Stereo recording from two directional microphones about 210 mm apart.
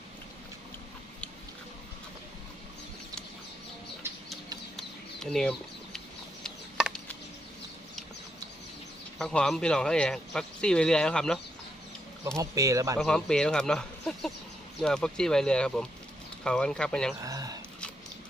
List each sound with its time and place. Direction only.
4.0 s bird: 10° right (ahead or behind)
4.8 s a sound: centre (ahead or behind)
9.1 s speech: 5° left (ahead or behind)
12.4 s speech: 15° right (ahead or behind)
13.0 s speech: 5° left (ahead or behind)
17.2 s a sound: 15° right (ahead or behind)